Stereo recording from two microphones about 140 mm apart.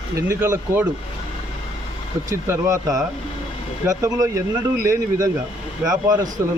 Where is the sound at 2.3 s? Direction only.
20° right (ahead or behind).